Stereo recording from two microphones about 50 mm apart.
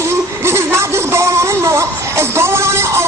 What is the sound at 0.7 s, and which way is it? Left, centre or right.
Speech, right.